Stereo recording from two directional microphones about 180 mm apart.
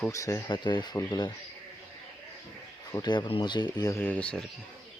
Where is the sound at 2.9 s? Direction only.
25° left (ahead or behind).